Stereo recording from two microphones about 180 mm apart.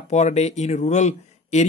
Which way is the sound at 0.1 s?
40° left (ahead or behind).